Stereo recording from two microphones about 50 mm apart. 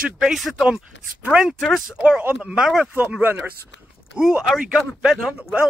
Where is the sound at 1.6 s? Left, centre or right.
Centre.